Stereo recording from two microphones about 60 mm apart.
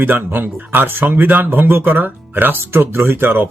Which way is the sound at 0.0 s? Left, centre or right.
Right.